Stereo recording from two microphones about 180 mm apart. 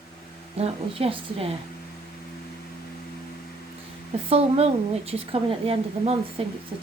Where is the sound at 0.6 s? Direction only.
30° right (ahead or behind).